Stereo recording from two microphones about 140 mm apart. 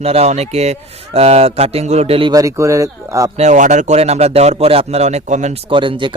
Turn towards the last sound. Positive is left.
turn(degrees=-35)  # may be behind; listen again after turning